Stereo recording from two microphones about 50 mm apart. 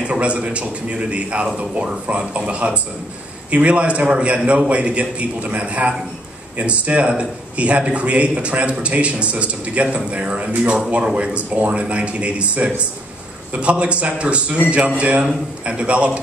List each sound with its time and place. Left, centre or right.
0.0 s a man's voice: right